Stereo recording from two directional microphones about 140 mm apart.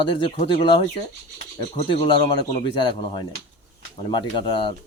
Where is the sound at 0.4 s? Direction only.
35° left (ahead or behind).